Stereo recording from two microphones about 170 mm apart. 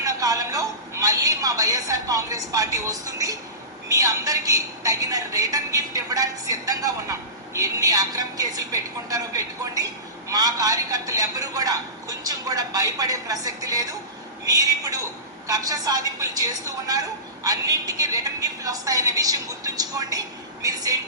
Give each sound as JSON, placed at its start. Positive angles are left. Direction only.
{"t": 0.0, "sound": "a woman's voice", "side_deg": -20}